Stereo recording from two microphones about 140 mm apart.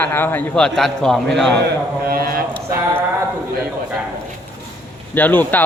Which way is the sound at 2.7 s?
15° right (ahead or behind).